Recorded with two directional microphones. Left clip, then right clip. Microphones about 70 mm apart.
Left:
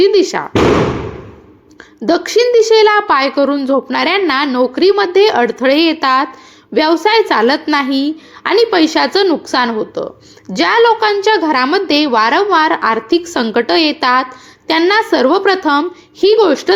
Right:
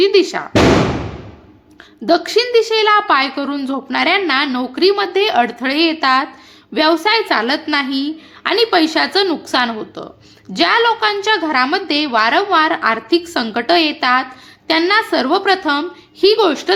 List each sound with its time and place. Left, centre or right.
0.0 s speech: left
2.0 s a woman's voice: left
3.5 s speech: left
3.9 s a woman's voice: left
4.4 s speech: left
5.6 s a woman's voice: left
6.7 s speech: left
7.1 s a woman's voice: left
9.2 s a woman's voice: left
10.8 s speech: left
11.3 s a woman's voice: left
16.4 s speech: left